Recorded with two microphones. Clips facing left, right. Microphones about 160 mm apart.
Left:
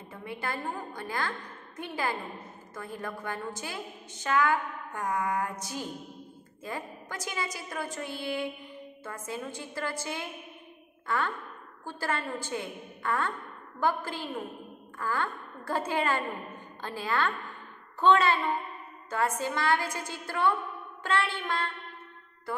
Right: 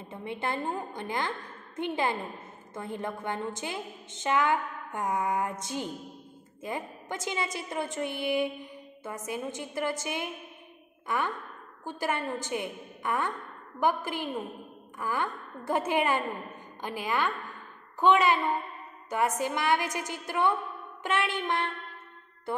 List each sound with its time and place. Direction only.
0.1 s a woman's voice: 25° right (ahead or behind)